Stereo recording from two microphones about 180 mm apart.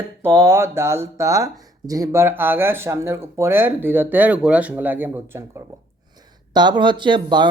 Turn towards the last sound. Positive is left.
turn(degrees=-25)  # may be behind; listen again after turning